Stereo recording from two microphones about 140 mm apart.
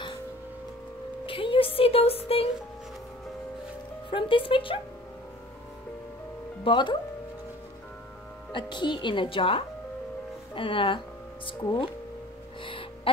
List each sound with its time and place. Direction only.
1.2 s speech: 40° left (ahead or behind)
4.1 s speech: 40° left (ahead or behind)
6.6 s speech: 35° left (ahead or behind)
8.5 s speech: 35° left (ahead or behind)
12.6 s a sound: 40° left (ahead or behind)